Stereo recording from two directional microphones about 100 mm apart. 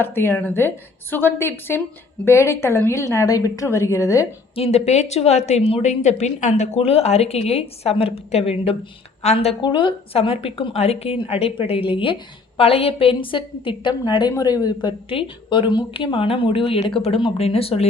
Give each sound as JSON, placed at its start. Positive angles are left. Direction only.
{"t": 0.0, "sound": "a woman's voice", "side_deg": 20}
{"t": 4.5, "sound": "a woman's voice", "side_deg": 85}
{"t": 9.6, "sound": "a woman's voice", "side_deg": 55}
{"t": 12.5, "sound": "a woman's voice", "side_deg": 70}
{"t": 17.2, "sound": "a woman's voice", "side_deg": 65}